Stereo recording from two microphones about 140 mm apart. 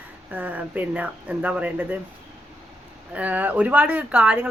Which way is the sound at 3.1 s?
10° right (ahead or behind).